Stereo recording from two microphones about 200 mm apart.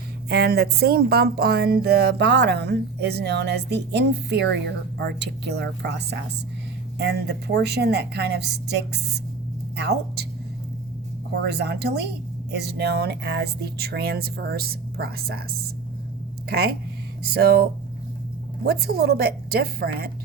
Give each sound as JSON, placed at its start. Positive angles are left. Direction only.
{"t": 0.3, "sound": "speech", "side_deg": -55}
{"t": 9.7, "sound": "speech", "side_deg": -55}
{"t": 11.3, "sound": "speech", "side_deg": -55}
{"t": 16.5, "sound": "speech", "side_deg": -55}